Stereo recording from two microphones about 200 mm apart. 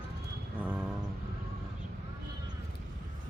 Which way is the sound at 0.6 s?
5° right (ahead or behind).